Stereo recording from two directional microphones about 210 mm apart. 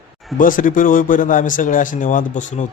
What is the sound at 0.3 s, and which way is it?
Speech, 40° left (ahead or behind).